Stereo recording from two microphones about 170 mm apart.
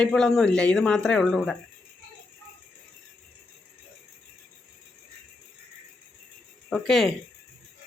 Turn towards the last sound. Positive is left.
turn(degrees=0)  # may be behind; listen again after turning